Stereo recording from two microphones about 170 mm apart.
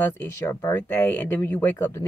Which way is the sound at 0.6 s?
10° left (ahead or behind).